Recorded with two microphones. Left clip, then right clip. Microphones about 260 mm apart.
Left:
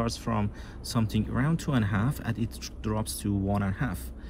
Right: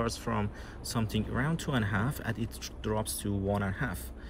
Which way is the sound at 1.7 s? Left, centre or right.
Left.